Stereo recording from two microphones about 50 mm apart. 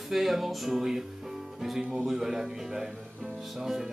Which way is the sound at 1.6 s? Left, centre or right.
Centre.